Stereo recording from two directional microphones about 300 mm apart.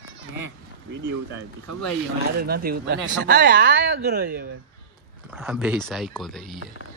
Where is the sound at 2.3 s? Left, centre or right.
Right.